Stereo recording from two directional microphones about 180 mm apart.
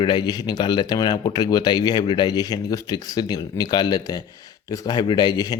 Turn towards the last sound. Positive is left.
turn(degrees=20)  # may be behind; listen again after turning